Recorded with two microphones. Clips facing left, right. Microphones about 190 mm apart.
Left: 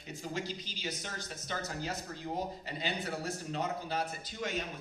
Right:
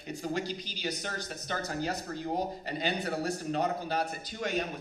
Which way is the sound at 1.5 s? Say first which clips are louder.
Right 3 dB; 55° right (ahead or behind).